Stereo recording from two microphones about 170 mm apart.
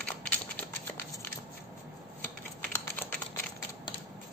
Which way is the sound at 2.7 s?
10° left (ahead or behind).